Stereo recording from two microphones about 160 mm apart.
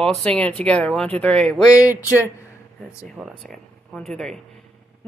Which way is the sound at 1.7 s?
10° right (ahead or behind).